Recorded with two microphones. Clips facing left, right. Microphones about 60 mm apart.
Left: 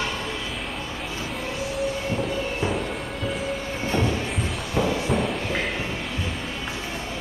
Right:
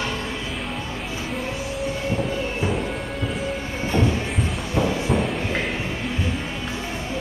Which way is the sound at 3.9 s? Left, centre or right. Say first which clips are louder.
Right 2 dB; centre.